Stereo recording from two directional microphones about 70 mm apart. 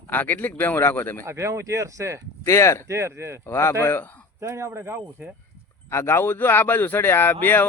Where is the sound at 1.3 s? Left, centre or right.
Right.